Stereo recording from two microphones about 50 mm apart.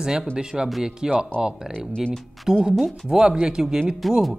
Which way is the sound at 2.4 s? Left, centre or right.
Centre.